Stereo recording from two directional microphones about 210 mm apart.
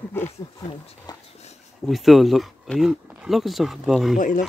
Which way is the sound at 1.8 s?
Centre (ahead or behind).